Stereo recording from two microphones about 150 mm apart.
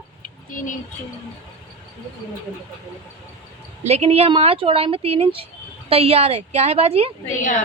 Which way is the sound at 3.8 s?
45° right (ahead or behind).